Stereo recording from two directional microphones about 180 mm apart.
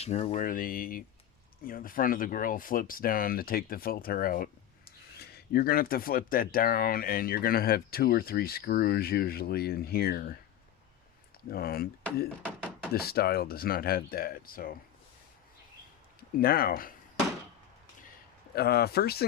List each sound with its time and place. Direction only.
0.0 s speech: 35° left (ahead or behind); by 10.3 s 55° left (ahead or behind)
11.4 s speech: 55° left (ahead or behind)
12.9 s speech: 60° left (ahead or behind)
16.4 s speech: 55° left (ahead or behind)
18.5 s speech: 60° left (ahead or behind)